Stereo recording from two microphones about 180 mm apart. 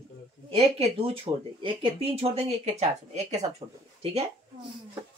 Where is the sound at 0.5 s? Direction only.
35° right (ahead or behind).